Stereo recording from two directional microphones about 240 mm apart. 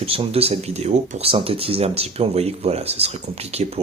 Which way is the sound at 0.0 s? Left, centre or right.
Right.